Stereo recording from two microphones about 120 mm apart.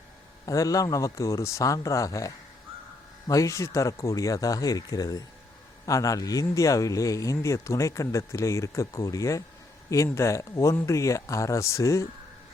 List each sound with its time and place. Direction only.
0.4 s speech: 30° left (ahead or behind)